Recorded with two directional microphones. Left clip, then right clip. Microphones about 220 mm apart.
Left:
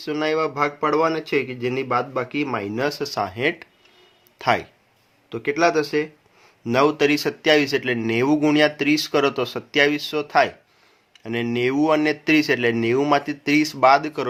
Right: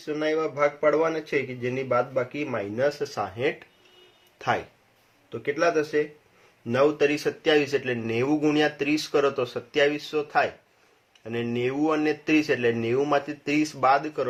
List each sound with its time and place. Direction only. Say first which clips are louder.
0.0 s speech: left 4 dB; 50° left (ahead or behind)